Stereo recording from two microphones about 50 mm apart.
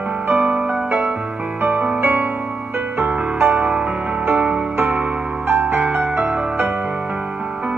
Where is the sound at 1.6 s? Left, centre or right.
Right.